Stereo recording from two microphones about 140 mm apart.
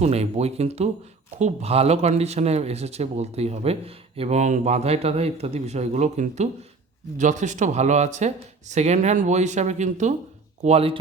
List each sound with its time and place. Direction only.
0.0 s speech: 50° right (ahead or behind)
10.6 s speech: 45° right (ahead or behind)